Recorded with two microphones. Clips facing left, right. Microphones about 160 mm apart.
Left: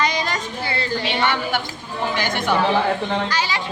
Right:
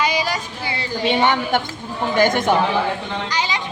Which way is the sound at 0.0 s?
10° right (ahead or behind).